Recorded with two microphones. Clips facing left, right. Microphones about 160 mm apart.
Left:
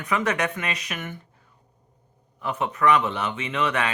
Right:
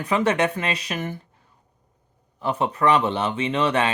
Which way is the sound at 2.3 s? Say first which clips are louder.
Right 4 dB; 30° right (ahead or behind).